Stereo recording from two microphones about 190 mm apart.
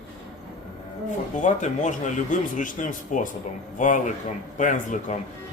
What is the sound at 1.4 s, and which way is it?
Speech, 40° left (ahead or behind).